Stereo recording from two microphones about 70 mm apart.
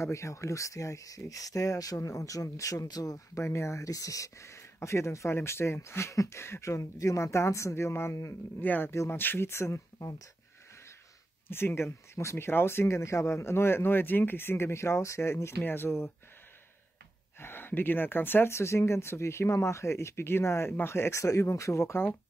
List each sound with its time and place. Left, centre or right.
0.0 s speech: left
3.3 s speech: left
8.5 s speech: left
9.9 s speech: left
11.4 s speech: left
17.4 s speech: left